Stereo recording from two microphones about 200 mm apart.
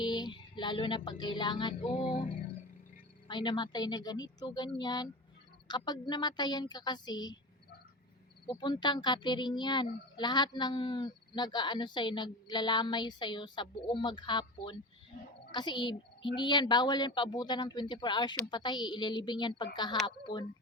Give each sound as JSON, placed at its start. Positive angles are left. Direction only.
{"t": 0.0, "sound": "music", "side_deg": 20}
{"t": 1.8, "sound": "a child's voice", "side_deg": 25}
{"t": 3.2, "sound": "a child's voice", "side_deg": 20}
{"t": 8.4, "sound": "a child's voice", "side_deg": 20}